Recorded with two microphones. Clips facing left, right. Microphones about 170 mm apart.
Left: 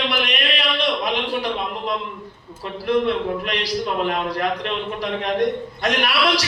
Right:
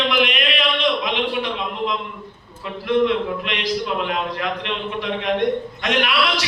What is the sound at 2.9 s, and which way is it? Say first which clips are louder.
A man's voice: right 1 dB; 40° left (ahead or behind).